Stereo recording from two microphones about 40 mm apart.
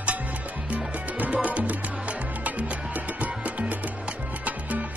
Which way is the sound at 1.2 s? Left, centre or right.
Right.